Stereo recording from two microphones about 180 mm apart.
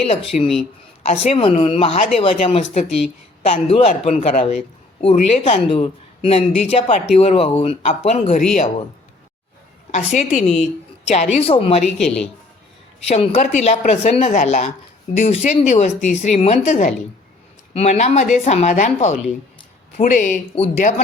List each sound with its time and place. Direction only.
0.1 s a man's voice: 35° left (ahead or behind)
9.9 s a man's voice: 40° left (ahead or behind)
11.8 s speech: centre (ahead or behind)
13.1 s a man's voice: 35° left (ahead or behind)